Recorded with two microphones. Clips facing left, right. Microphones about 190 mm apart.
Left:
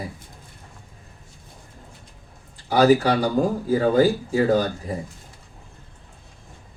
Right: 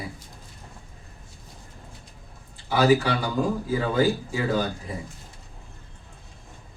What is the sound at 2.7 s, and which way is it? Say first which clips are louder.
Speech: left 4 dB; 40° left (ahead or behind).